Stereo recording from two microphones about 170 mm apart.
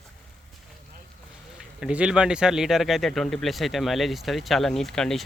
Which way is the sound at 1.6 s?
5° right (ahead or behind).